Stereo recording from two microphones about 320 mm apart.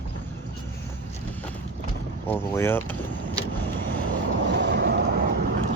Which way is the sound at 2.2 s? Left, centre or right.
Centre.